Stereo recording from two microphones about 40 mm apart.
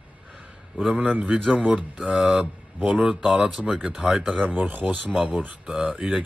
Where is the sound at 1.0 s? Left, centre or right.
Right.